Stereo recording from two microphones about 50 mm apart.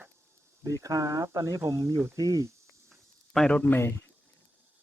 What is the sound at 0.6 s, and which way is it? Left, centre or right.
Speech, right.